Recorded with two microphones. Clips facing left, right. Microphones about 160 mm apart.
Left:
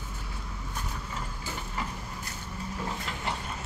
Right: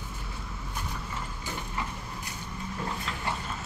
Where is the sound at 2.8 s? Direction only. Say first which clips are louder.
Right 1 dB; 5° left (ahead or behind).